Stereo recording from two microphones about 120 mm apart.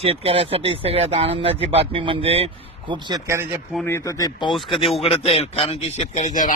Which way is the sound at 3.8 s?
25° left (ahead or behind).